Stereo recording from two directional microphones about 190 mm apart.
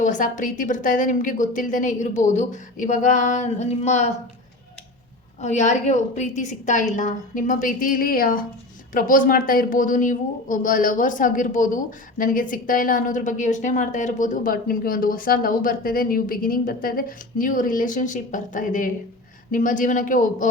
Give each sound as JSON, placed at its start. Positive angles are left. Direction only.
{"t": 0.0, "sound": "a woman's voice", "side_deg": 40}
{"t": 5.4, "sound": "a woman's voice", "side_deg": 40}